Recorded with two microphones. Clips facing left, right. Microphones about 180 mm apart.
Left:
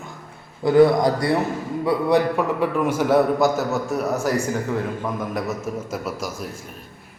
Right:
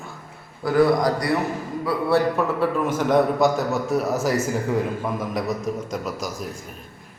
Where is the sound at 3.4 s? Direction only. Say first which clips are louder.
Even; centre (ahead or behind).